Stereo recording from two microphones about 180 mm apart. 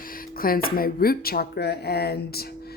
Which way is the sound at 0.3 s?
55° left (ahead or behind).